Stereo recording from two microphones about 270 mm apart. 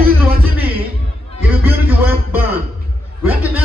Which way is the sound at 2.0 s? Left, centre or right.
Centre.